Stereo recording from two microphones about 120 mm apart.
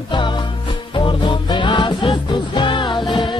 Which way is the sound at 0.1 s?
40° left (ahead or behind).